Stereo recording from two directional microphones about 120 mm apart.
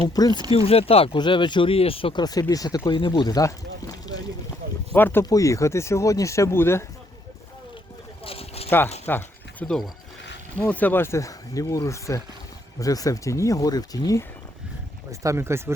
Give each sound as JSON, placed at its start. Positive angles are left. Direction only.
{"t": 0.2, "sound": "speech", "side_deg": 35}
{"t": 0.5, "sound": "speech", "side_deg": 50}
{"t": 2.2, "sound": "speech", "side_deg": 30}
{"t": 4.9, "sound": "speech", "side_deg": 15}
{"t": 5.2, "sound": "speech", "side_deg": 30}
{"t": 8.2, "sound": "a sound", "side_deg": 55}
{"t": 9.0, "sound": "a sound", "side_deg": 15}
{"t": 10.6, "sound": "speech", "side_deg": 15}
{"t": 15.2, "sound": "speech", "side_deg": -25}